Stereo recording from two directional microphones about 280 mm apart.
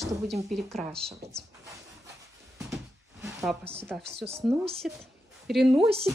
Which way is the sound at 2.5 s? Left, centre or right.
Centre.